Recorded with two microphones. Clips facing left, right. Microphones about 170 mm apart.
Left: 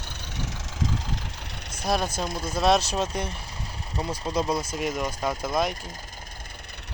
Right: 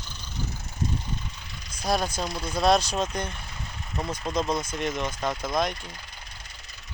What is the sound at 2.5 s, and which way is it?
Speech, 5° left (ahead or behind).